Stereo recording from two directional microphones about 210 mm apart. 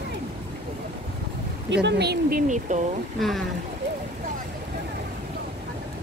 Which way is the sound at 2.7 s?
35° right (ahead or behind).